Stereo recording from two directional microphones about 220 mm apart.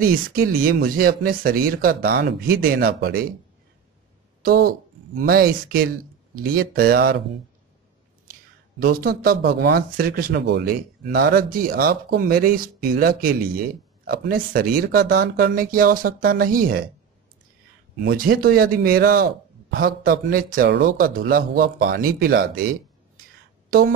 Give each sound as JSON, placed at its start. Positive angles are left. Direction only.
{"t": 0.0, "sound": "speech", "side_deg": -40}
{"t": 4.4, "sound": "speech", "side_deg": -45}
{"t": 8.7, "sound": "speech", "side_deg": -45}
{"t": 18.0, "sound": "speech", "side_deg": -40}